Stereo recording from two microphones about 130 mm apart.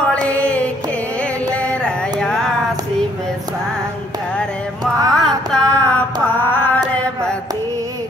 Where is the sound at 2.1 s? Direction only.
5° left (ahead or behind).